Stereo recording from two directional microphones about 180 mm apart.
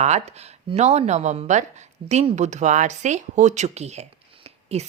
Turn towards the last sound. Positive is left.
turn(degrees=-35)  # may be behind; listen again after turning